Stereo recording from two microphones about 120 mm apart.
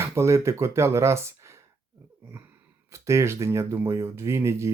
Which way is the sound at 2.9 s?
25° right (ahead or behind).